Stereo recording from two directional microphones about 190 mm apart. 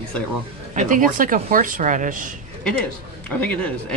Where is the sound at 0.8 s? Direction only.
45° right (ahead or behind).